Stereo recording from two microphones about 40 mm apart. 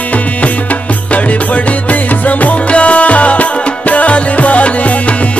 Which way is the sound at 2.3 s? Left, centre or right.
Left.